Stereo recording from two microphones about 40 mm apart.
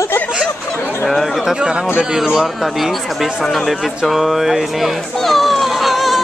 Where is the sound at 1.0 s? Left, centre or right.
Centre.